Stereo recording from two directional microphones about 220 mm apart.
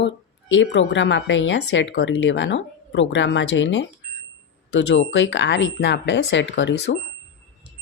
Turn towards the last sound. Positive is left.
turn(degrees=55)  # may be behind; listen again after turning